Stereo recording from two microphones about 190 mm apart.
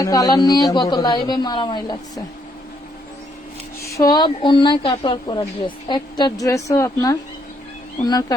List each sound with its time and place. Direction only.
0.0 s a woman's voice: 20° left (ahead or behind)
3.8 s a woman's voice: 20° left (ahead or behind)